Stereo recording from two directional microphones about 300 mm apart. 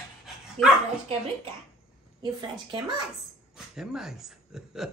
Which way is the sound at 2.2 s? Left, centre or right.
Centre.